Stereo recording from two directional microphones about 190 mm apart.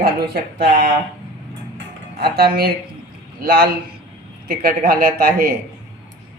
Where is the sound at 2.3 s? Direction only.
55° right (ahead or behind).